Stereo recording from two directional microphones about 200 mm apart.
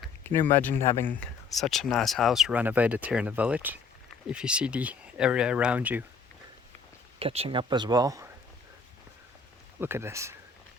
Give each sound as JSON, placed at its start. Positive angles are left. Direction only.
{"t": 0.3, "sound": "speech", "side_deg": 10}
{"t": 7.2, "sound": "speech", "side_deg": -30}
{"t": 9.8, "sound": "speech", "side_deg": -10}